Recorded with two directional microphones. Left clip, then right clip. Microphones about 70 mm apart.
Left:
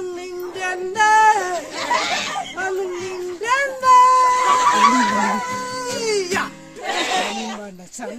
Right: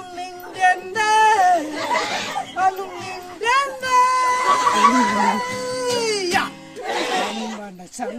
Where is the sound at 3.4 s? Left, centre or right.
Left.